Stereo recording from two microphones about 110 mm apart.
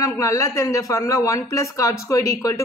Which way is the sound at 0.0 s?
30° left (ahead or behind).